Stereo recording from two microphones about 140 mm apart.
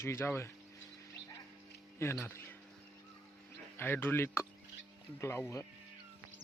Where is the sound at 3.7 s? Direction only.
15° left (ahead or behind).